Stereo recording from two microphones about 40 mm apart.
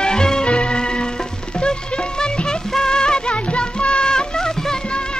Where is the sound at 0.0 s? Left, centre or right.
Centre.